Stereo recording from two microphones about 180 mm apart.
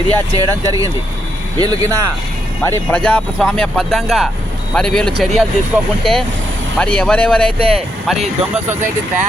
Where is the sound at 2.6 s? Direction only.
10° left (ahead or behind).